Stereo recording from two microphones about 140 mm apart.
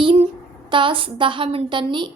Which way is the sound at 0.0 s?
40° right (ahead or behind).